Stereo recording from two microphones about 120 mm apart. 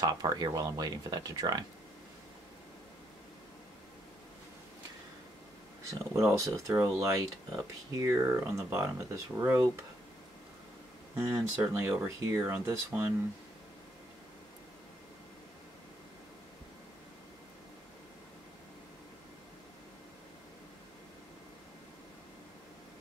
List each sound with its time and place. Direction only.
0.0 s speech: 35° right (ahead or behind)
5.9 s speech: 25° right (ahead or behind)
11.1 s speech: 20° right (ahead or behind)